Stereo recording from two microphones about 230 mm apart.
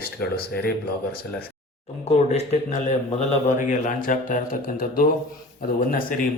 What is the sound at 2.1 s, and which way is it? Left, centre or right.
Speech, left.